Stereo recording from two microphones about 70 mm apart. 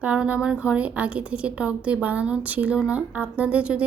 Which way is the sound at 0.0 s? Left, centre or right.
Centre.